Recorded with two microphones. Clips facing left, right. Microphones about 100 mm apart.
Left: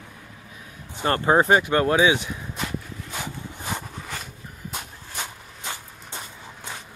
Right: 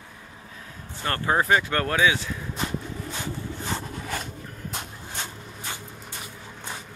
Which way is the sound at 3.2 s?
15° left (ahead or behind).